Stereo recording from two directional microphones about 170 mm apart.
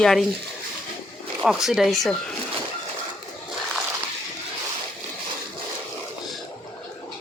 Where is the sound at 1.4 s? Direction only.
Centre (ahead or behind).